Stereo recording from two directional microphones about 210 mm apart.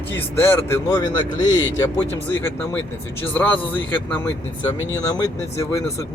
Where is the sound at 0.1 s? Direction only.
10° left (ahead or behind).